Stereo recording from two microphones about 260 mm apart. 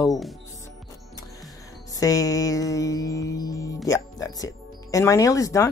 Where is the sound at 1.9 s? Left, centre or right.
Centre.